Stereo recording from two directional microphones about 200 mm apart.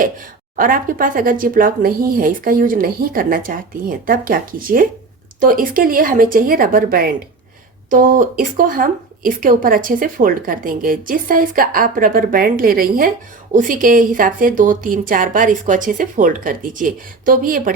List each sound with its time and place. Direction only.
0.5 s speech: 45° right (ahead or behind)